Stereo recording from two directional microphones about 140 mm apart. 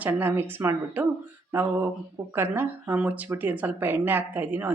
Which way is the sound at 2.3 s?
15° right (ahead or behind).